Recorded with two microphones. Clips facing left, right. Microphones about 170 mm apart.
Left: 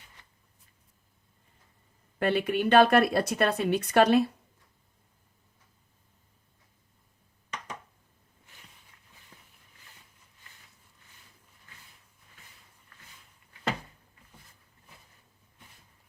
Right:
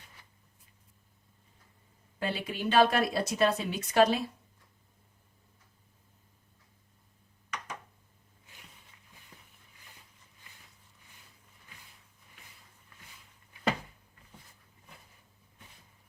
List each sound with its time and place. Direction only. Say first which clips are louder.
2.1 s speech: left 8 dB; 65° left (ahead or behind)